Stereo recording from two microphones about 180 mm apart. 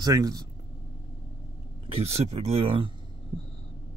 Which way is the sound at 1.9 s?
35° right (ahead or behind).